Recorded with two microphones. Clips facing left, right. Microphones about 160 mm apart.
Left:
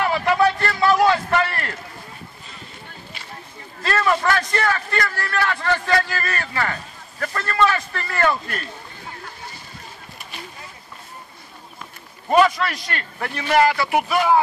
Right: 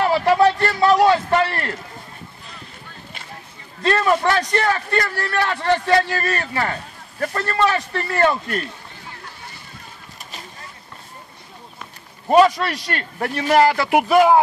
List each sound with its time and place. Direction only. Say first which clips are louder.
0.0 s a sound: right 3 dB; 35° right (ahead or behind)
3.8 s a man's voice: right 3 dB; 25° right (ahead or behind)
12.3 s a man's voice: right 3 dB; 35° right (ahead or behind)